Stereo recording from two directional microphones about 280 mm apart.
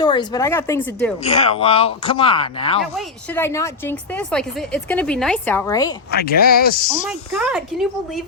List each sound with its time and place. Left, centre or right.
0.0 s a woman's voice: centre
1.2 s speech: left
2.9 s a woman's voice: centre
6.1 s speech: left
7.1 s a woman's voice: centre